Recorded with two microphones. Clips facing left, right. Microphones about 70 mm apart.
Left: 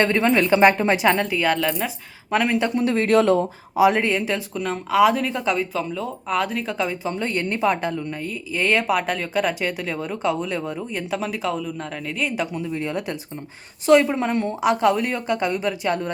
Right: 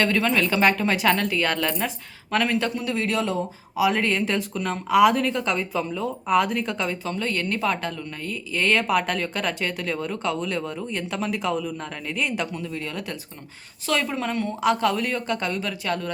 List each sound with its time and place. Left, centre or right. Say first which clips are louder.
0.0 s speech: left 3 dB; left; by 1.9 s centre
2.3 s speech: left 2 dB; centre
2.7 s speech: left 7 dB; left
3.8 s speech: left 5 dB; left
4.0 s speech: left 1 dB; centre
7.0 s speech: left 2 dB; left